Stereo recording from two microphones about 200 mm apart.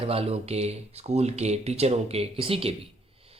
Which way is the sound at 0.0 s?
30° right (ahead or behind).